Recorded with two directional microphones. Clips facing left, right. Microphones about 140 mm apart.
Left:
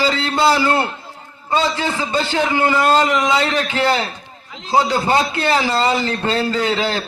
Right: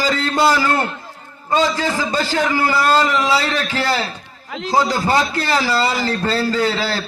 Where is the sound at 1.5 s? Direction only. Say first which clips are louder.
Right 1 dB; 40° right (ahead or behind).